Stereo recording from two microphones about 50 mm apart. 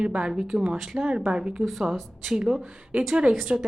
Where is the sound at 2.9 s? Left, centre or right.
Right.